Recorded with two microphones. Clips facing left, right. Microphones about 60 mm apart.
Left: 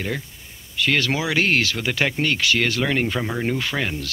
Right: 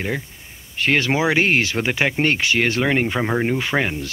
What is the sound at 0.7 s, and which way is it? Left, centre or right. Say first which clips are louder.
Speech: right 3 dB; right.